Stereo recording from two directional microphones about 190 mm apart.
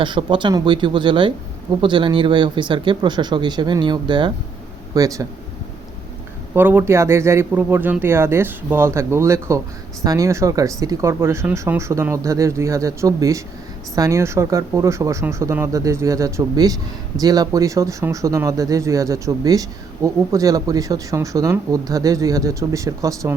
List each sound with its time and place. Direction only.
0.0 s speech: 25° right (ahead or behind)
6.5 s speech: 10° right (ahead or behind)